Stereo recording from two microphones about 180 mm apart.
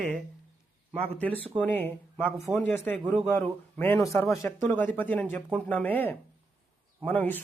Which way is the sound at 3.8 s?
15° left (ahead or behind).